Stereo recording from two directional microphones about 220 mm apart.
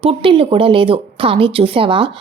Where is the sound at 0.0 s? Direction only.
25° right (ahead or behind).